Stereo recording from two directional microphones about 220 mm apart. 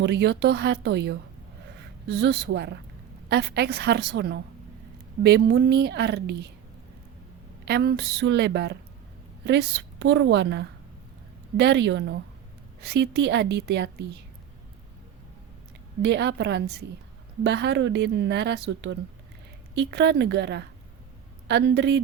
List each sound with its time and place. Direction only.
0.0 s a woman's voice: 50° right (ahead or behind)
7.6 s a woman's voice: 45° right (ahead or behind)
16.0 s a woman's voice: 50° right (ahead or behind)